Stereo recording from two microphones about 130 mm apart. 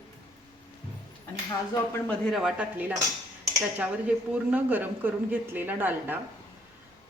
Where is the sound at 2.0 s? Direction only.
5° left (ahead or behind).